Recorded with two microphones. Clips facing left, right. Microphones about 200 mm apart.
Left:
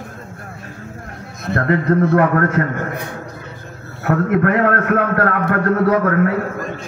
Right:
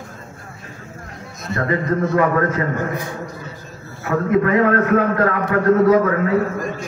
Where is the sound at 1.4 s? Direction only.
60° left (ahead or behind).